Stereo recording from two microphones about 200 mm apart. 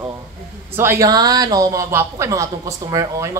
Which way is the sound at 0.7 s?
10° right (ahead or behind).